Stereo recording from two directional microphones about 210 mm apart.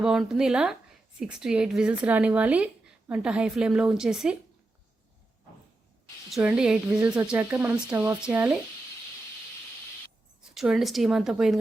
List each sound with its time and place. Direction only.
0.0 s speech: centre (ahead or behind)
6.3 s speech: 5° right (ahead or behind)
10.5 s speech: centre (ahead or behind)